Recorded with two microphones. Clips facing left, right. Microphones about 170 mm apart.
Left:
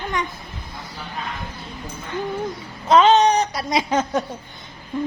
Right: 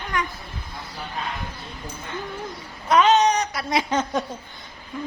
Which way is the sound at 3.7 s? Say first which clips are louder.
Left 1 dB; 15° left (ahead or behind).